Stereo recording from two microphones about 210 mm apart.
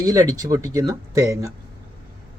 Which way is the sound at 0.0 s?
15° right (ahead or behind).